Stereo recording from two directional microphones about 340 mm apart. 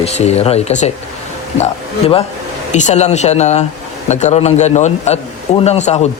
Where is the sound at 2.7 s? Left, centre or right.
Left.